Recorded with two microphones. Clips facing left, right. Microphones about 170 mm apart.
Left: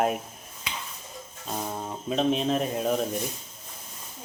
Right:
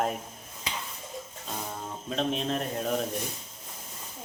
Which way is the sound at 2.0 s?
5° left (ahead or behind).